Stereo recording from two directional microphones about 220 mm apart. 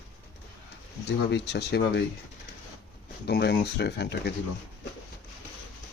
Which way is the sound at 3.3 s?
45° left (ahead or behind).